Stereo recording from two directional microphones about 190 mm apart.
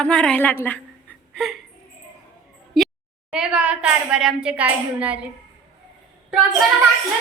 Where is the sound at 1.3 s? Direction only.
Centre (ahead or behind).